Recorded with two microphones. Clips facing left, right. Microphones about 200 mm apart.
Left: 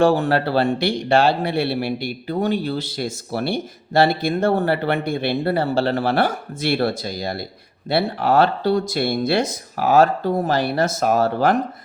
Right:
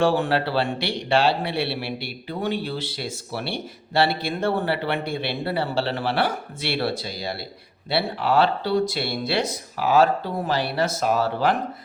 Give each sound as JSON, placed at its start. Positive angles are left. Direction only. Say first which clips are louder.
{"t": 0.0, "sound": "speech", "louder": "left 4 dB", "side_deg": 45}